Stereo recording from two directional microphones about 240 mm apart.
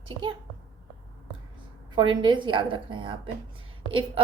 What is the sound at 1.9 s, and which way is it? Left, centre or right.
A woman's voice, centre.